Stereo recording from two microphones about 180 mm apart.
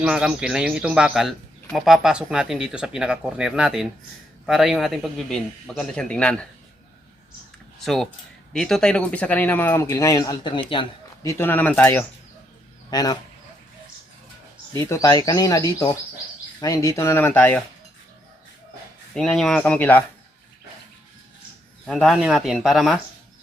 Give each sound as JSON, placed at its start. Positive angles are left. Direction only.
{"t": 0.0, "sound": "speech", "side_deg": -5}
{"t": 8.5, "sound": "speech", "side_deg": 0}
{"t": 11.2, "sound": "speech", "side_deg": 15}
{"t": 12.9, "sound": "speech", "side_deg": 20}
{"t": 14.7, "sound": "speech", "side_deg": 15}
{"t": 19.1, "sound": "speech", "side_deg": 5}
{"t": 21.8, "sound": "speech", "side_deg": 0}